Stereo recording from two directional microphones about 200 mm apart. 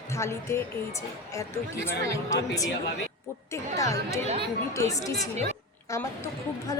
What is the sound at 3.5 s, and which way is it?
Speech, 15° left (ahead or behind).